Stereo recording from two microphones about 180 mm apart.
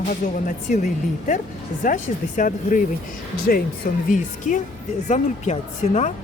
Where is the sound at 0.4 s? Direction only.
45° left (ahead or behind).